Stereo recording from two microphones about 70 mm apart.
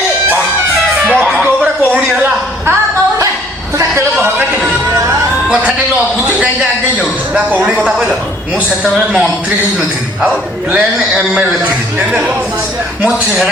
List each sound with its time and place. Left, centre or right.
1.2 s a sound: centre
7.3 s a man's voice: centre
10.7 s a man's voice: centre